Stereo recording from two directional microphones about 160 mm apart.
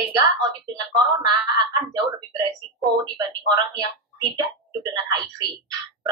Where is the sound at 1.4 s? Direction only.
25° right (ahead or behind).